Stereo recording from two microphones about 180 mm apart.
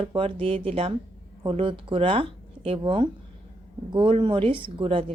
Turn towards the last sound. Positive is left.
turn(degrees=-30)  # may be behind; listen again after turning